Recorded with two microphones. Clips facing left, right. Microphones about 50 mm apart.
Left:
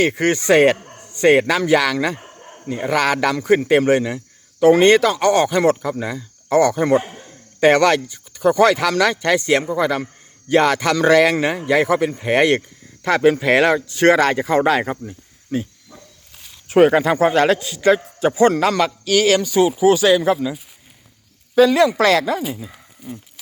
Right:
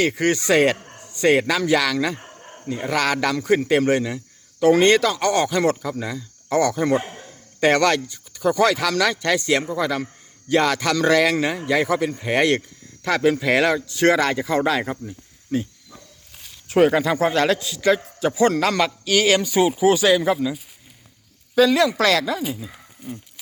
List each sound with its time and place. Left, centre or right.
0.0 s a man's voice: left
15.0 s cricket: centre
16.6 s speech: left
18.7 s speech: centre
21.5 s speech: centre
22.4 s speech: centre